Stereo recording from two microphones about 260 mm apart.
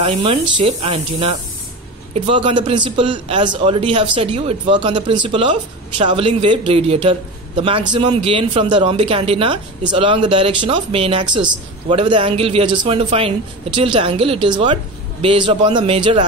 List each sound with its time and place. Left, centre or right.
0.0 s a man's voice: centre